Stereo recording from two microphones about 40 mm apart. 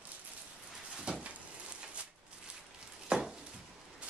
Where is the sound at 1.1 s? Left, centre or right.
Right.